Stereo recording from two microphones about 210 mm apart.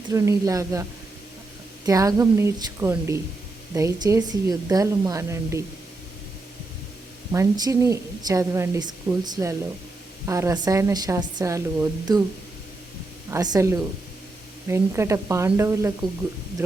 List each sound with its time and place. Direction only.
0.1 s a woman's voice: 15° right (ahead or behind)
1.9 s a woman's voice: 15° right (ahead or behind)
7.3 s a woman's voice: 15° right (ahead or behind)
13.3 s a woman's voice: 15° right (ahead or behind)